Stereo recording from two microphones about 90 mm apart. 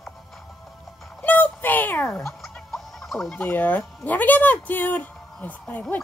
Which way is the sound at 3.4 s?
20° left (ahead or behind).